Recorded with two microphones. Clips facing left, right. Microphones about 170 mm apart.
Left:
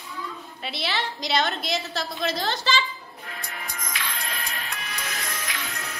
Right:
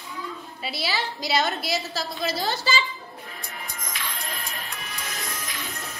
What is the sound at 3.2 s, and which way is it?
Music, 75° left (ahead or behind).